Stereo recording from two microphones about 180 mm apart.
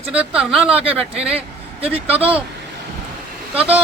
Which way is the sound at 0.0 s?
5° right (ahead or behind).